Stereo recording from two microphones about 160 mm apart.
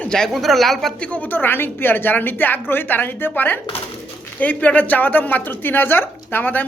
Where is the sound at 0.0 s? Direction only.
5° left (ahead or behind).